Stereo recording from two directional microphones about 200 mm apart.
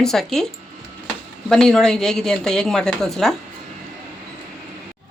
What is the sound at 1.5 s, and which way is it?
Speech, 5° left (ahead or behind).